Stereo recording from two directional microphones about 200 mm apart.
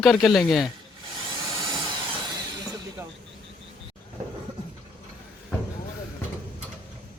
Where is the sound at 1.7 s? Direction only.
20° right (ahead or behind).